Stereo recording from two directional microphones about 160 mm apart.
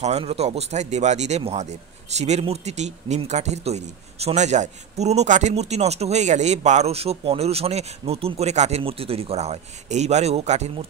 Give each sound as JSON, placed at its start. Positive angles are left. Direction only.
{"t": 0.0, "sound": "speech", "side_deg": -40}